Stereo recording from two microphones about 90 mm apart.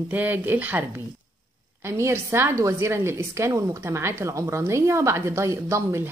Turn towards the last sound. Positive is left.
turn(degrees=-35)  # may be behind; listen again after turning